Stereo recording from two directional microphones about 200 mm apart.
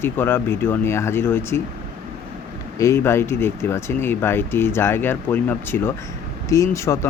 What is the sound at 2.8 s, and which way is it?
Speech, 15° left (ahead or behind).